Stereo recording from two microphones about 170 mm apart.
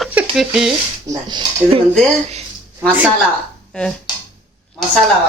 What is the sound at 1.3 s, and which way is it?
Speech, 25° right (ahead or behind).